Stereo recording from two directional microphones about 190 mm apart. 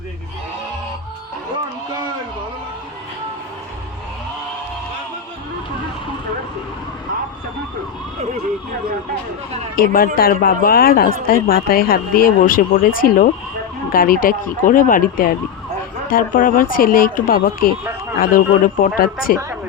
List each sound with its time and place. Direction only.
9.7 s a woman's voice: 50° left (ahead or behind)